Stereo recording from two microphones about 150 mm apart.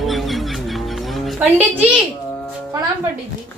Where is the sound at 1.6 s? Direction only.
10° right (ahead or behind).